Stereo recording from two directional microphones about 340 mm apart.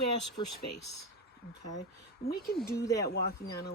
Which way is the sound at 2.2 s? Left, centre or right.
Left.